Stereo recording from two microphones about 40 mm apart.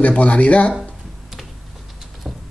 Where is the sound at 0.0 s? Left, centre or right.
Left.